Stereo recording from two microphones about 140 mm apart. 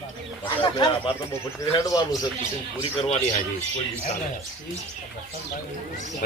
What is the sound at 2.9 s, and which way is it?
Speech, 50° left (ahead or behind).